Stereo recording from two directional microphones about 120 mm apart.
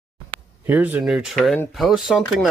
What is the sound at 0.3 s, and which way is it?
Speech, 15° right (ahead or behind).